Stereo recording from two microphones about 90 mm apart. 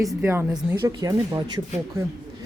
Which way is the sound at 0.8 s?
45° right (ahead or behind).